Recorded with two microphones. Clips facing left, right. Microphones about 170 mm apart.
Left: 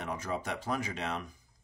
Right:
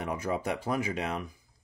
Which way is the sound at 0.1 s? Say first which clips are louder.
Right 4 dB; 10° right (ahead or behind).